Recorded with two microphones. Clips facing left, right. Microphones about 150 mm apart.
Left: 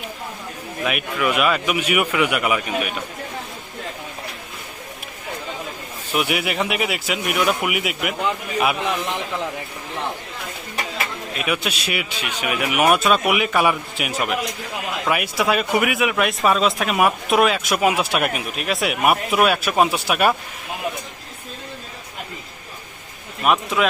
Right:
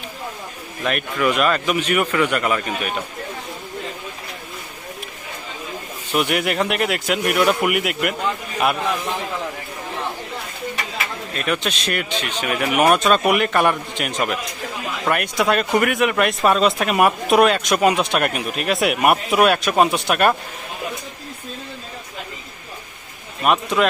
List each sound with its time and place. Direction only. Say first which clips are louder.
0.9 s speech: right 2 dB; 5° left (ahead or behind)
6.1 s speech: right 2 dB; 5° left (ahead or behind)
11.3 s speech: right 1 dB; 5° left (ahead or behind)
23.4 s speech: right 1 dB; centre (ahead or behind)